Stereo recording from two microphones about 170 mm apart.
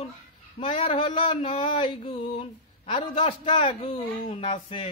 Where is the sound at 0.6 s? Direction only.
35° left (ahead or behind).